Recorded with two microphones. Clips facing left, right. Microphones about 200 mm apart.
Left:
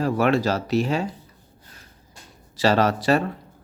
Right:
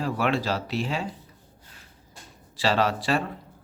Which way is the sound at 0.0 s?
45° left (ahead or behind).